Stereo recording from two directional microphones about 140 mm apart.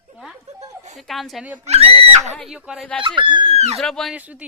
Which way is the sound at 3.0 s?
35° right (ahead or behind).